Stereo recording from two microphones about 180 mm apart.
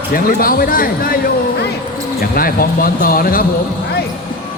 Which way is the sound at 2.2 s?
55° left (ahead or behind).